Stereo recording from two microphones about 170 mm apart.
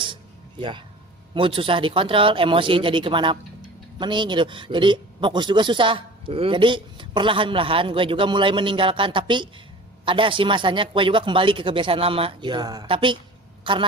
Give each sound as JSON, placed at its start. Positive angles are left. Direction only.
{"t": 1.3, "sound": "a man's voice", "side_deg": -30}